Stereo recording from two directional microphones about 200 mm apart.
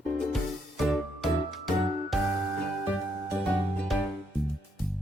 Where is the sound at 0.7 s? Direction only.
Centre (ahead or behind).